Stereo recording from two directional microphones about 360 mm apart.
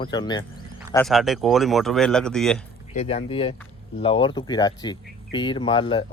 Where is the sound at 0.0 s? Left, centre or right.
Centre.